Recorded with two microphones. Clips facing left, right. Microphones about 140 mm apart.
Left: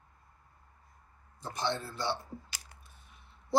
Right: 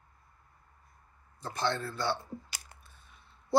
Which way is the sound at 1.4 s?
20° left (ahead or behind).